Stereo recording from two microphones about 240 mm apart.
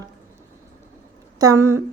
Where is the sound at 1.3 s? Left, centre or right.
Centre.